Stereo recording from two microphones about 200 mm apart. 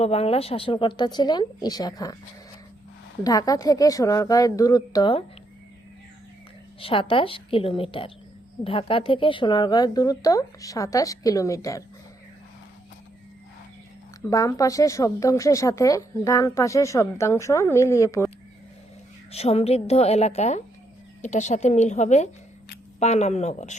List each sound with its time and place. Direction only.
0.0 s a woman's voice: 30° left (ahead or behind)
3.2 s speech: 20° left (ahead or behind)
6.7 s a woman's voice: 25° left (ahead or behind)
14.3 s speech: 15° left (ahead or behind)
19.3 s a woman's voice: 30° left (ahead or behind)